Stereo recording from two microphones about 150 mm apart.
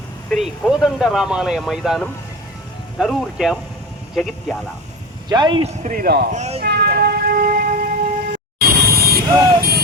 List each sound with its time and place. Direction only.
0.3 s speech: centre (ahead or behind)
5.3 s a man's voice: 30° right (ahead or behind)
5.9 s a man's voice: 80° right
6.3 s speech: 50° right (ahead or behind)
6.6 s music: 90° right
9.0 s vehicle: 90° right